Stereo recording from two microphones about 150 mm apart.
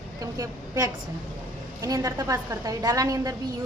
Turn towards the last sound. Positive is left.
turn(degrees=-25)  # may be behind; listen again after turning